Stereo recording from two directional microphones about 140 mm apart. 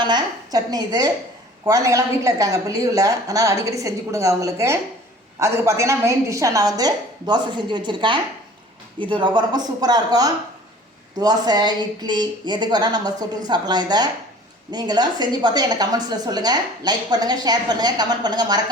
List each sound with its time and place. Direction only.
0.0 s a woman's voice: 30° right (ahead or behind)